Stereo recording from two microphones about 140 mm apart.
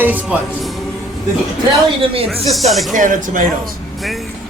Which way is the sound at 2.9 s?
65° right (ahead or behind).